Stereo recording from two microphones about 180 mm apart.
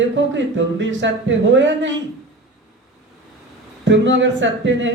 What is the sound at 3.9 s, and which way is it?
Speech, 90° right.